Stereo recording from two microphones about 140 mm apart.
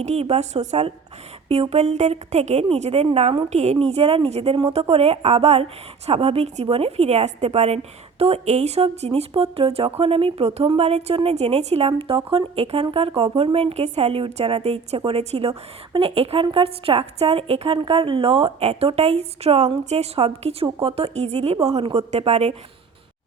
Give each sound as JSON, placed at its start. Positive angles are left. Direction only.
{"t": 0.0, "sound": "a woman's voice", "side_deg": -50}